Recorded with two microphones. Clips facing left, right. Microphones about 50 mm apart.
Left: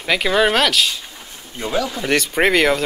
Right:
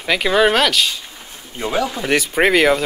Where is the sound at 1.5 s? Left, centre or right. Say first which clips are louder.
Right 1 dB; right.